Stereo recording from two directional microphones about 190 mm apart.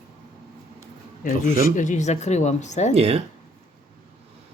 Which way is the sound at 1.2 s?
45° left (ahead or behind).